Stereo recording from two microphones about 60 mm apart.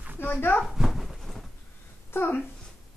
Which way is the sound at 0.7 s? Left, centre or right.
Centre.